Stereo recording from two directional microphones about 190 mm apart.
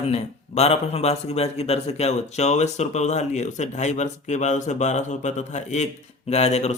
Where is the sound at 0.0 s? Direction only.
35° left (ahead or behind).